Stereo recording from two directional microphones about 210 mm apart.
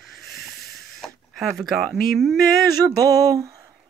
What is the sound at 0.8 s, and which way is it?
Speech, centre (ahead or behind).